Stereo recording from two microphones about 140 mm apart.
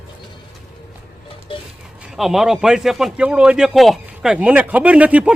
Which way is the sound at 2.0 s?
Centre (ahead or behind).